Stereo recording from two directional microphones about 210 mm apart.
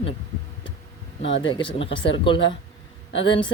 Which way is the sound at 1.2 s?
60° left (ahead or behind).